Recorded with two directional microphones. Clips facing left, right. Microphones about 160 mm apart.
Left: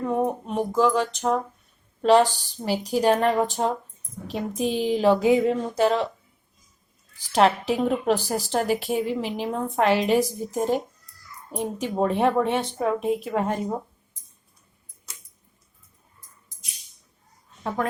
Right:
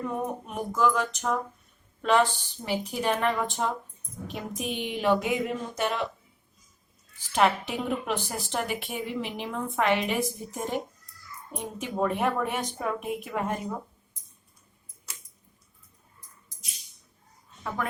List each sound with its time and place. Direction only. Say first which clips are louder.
0.2 s a woman's voice: left 7 dB; 30° left (ahead or behind)
7.2 s a woman's voice: left 4 dB; 35° left (ahead or behind)